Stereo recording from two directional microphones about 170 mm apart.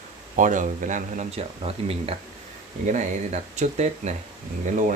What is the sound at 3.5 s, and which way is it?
Speech, 45° right (ahead or behind).